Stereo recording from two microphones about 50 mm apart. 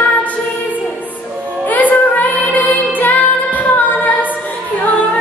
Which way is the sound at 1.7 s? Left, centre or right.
Left.